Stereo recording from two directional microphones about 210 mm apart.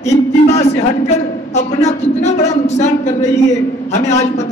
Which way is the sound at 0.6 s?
30° left (ahead or behind).